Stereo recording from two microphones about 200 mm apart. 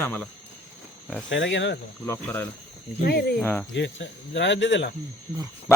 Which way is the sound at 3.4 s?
10° left (ahead or behind).